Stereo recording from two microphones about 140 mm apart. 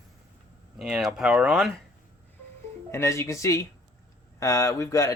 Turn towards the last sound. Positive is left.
turn(degrees=25)  # may be behind; listen again after turning